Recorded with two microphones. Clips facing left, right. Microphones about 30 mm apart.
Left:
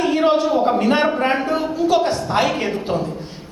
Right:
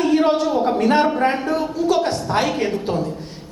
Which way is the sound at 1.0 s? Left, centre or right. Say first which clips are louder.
Even; left.